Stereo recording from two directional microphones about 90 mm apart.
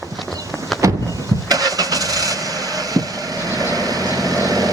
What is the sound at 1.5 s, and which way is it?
Vehicle, 45° right (ahead or behind).